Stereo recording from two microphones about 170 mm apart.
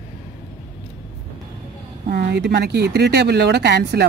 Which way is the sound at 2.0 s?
80° right.